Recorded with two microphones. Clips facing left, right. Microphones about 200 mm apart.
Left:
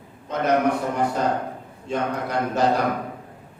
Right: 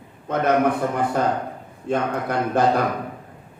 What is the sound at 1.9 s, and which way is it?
Speech, 55° right (ahead or behind).